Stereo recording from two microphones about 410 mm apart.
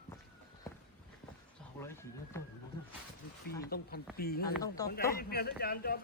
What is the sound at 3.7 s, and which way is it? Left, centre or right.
Speech, left.